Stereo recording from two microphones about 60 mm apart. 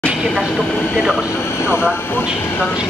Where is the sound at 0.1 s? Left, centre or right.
Centre.